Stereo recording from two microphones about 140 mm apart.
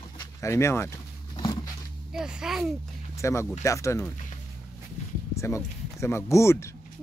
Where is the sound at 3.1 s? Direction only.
20° left (ahead or behind).